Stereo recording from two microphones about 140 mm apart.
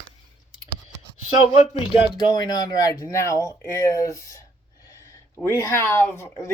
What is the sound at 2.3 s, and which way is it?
Speech, 30° left (ahead or behind).